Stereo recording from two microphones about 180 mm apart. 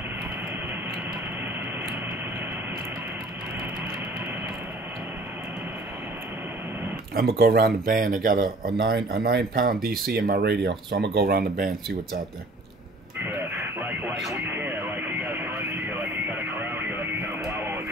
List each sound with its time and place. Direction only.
7.3 s speech: 55° right (ahead or behind)
8.7 s speech: 65° right (ahead or behind)
13.3 s radio: 10° right (ahead or behind)